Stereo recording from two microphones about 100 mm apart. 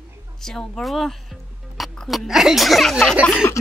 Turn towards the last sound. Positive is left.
turn(degrees=20)  # may be behind; listen again after turning